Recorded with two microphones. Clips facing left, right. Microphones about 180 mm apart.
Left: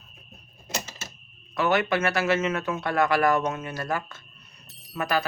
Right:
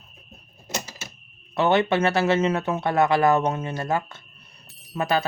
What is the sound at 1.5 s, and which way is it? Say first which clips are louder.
Speech: right 4 dB; 25° right (ahead or behind).